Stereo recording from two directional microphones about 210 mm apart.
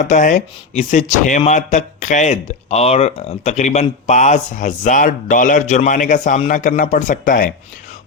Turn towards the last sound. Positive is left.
turn(degrees=40)  # may be behind; listen again after turning